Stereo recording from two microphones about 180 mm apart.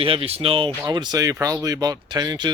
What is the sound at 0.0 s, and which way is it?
Speech, 30° right (ahead or behind).